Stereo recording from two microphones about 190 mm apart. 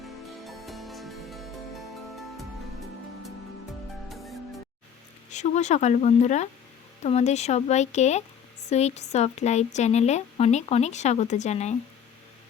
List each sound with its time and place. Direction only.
0.4 s music: centre (ahead or behind)
4.1 s music: centre (ahead or behind)
5.3 s speech: 40° left (ahead or behind)